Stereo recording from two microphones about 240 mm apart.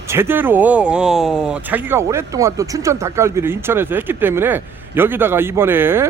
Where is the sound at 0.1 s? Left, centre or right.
Centre.